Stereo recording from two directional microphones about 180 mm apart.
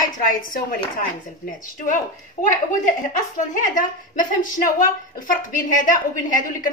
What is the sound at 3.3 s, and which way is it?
Speech, 50° left (ahead or behind).